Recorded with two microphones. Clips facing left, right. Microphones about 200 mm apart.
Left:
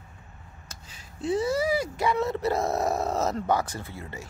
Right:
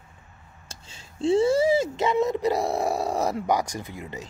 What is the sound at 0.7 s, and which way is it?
A man's voice, 25° right (ahead or behind).